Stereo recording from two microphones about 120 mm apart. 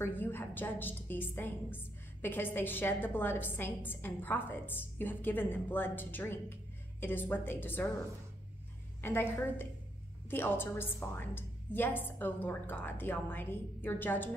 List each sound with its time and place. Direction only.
0.0 s a woman's voice: 15° left (ahead or behind)
9.0 s a woman's voice: 20° left (ahead or behind)